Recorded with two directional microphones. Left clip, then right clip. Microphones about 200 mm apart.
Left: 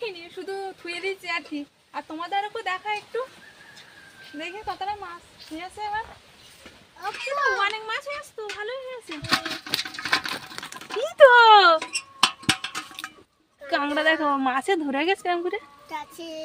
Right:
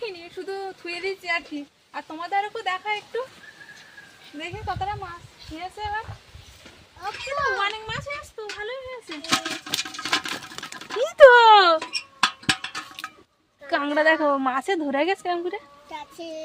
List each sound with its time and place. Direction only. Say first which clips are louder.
0.0 s a woman's voice: even; 5° right (ahead or behind)
4.4 s a woman's voice: right 2 dB; 5° right (ahead or behind)
7.0 s a child's voice: left 1 dB; 10° left (ahead or behind)
9.4 s a sound: even; 10° right (ahead or behind)
11.0 s speech: right 2 dB; 15° right (ahead or behind)
11.9 s music: left 1 dB; 15° left (ahead or behind)
13.7 s a woman's voice: right 2 dB; 5° right (ahead or behind)
15.9 s speech: left 1 dB; 30° left (ahead or behind)